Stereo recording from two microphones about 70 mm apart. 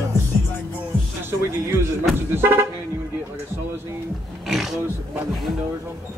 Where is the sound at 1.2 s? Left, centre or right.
Right.